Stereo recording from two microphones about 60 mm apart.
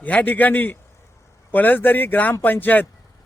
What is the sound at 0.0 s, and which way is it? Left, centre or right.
Speech, left.